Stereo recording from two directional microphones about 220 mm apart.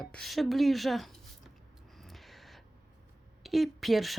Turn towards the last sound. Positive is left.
turn(degrees=0)  # may be behind; listen again after turning